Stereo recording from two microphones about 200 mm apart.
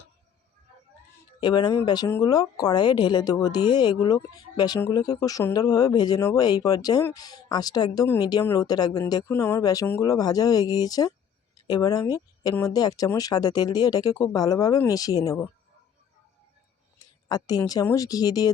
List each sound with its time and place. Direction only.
1.4 s a woman's voice: 20° left (ahead or behind)
17.2 s speech: 20° left (ahead or behind)